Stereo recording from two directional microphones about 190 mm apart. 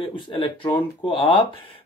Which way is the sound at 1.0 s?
25° left (ahead or behind).